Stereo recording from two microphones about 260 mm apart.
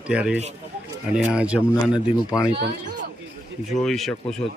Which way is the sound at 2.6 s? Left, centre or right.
Right.